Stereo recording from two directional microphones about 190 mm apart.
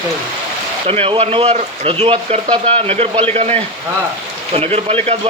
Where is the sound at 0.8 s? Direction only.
30° right (ahead or behind).